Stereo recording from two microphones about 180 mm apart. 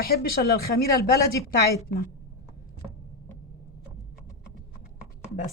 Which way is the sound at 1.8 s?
55° left (ahead or behind).